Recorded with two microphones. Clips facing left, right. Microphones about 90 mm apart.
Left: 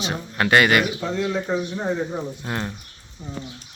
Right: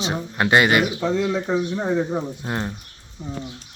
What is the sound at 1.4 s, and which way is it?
Speech, 65° right (ahead or behind).